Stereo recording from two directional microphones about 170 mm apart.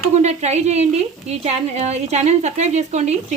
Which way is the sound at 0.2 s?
40° right (ahead or behind).